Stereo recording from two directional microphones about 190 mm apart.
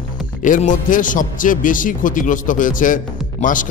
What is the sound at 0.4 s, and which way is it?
A man's voice, 40° left (ahead or behind).